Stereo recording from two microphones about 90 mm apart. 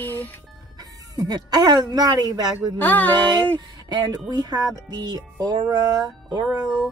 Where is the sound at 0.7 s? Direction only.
45° right (ahead or behind).